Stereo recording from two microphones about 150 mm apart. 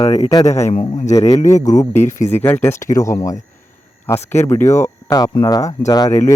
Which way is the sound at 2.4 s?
15° left (ahead or behind).